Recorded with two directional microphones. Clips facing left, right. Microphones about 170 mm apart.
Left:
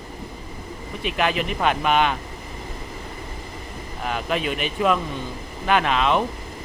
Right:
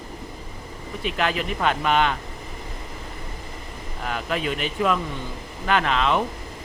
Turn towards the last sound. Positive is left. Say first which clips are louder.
# left 2 dB
turn(degrees=15)  # may be behind; listen again after turning